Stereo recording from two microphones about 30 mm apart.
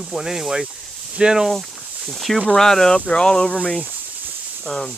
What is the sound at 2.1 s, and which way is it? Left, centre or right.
Speech, centre.